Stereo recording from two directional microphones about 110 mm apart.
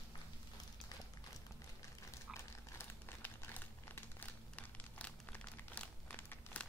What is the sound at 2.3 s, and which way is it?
Crumpling, 20° left (ahead or behind).